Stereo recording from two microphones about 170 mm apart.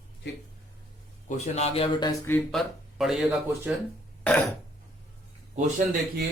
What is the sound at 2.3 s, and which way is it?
Speech, 5° left (ahead or behind).